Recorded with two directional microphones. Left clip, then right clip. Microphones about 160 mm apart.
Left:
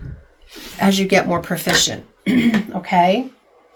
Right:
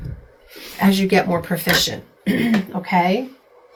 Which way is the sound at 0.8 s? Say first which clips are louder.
Left 1 dB; 55° left (ahead or behind).